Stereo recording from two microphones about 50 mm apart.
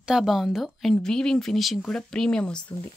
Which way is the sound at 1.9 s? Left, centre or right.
Centre.